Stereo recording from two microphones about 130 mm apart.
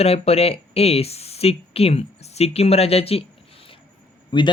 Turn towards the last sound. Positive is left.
turn(degrees=40)  # may be behind; listen again after turning